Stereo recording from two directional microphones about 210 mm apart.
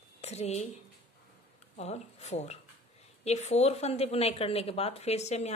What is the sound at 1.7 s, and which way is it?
A woman's voice, 30° left (ahead or behind).